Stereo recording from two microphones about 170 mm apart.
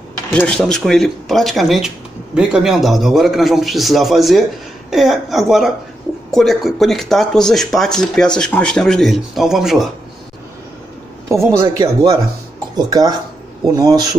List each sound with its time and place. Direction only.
0.3 s speech: 5° left (ahead or behind)
11.2 s speech: 15° right (ahead or behind)